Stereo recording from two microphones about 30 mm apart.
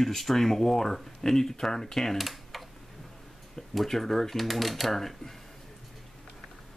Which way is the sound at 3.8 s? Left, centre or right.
Centre.